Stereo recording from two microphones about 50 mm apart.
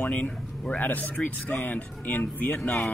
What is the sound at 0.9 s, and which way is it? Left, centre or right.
Speech, left.